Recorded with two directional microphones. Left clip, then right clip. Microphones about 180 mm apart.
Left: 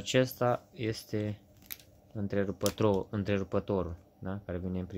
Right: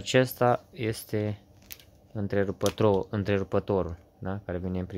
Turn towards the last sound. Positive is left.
turn(degrees=-20)  # may be behind; listen again after turning